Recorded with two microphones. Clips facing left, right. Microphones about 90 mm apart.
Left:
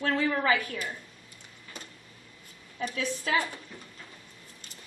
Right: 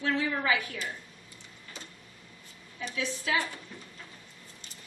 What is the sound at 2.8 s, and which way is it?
Speech, 50° left (ahead or behind).